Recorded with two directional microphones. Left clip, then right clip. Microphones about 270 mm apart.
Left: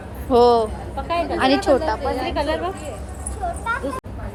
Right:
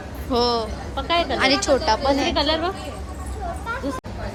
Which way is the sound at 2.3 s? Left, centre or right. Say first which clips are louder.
Right 1 dB; right.